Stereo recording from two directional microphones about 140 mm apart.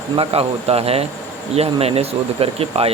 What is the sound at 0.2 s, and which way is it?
Speech, 45° right (ahead or behind).